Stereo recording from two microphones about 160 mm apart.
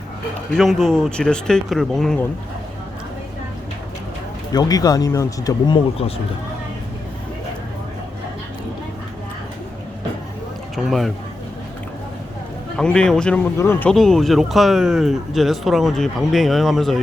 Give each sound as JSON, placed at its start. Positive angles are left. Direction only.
{"t": 0.5, "sound": "speech", "side_deg": 0}
{"t": 4.5, "sound": "speech", "side_deg": 25}
{"t": 10.8, "sound": "speech", "side_deg": 0}
{"t": 12.7, "sound": "speech", "side_deg": 5}
{"t": 13.9, "sound": "speech", "side_deg": 0}